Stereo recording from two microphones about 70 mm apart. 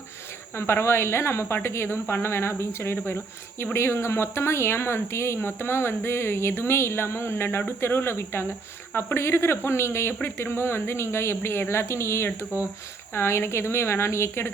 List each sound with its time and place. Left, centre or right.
0.5 s speech: left